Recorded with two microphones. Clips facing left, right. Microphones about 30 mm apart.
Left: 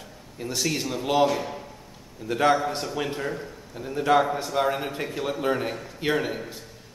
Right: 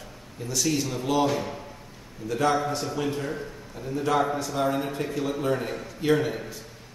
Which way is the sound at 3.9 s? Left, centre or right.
Left.